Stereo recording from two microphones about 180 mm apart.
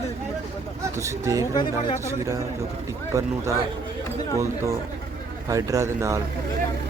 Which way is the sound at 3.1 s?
15° right (ahead or behind).